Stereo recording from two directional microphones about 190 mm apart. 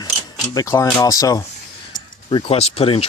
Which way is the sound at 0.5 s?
15° left (ahead or behind).